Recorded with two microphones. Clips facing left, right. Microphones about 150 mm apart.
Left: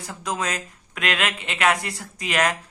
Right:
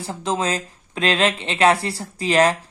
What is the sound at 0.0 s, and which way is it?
Speech, 30° right (ahead or behind).